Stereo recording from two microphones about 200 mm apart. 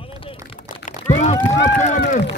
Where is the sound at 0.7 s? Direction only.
40° left (ahead or behind).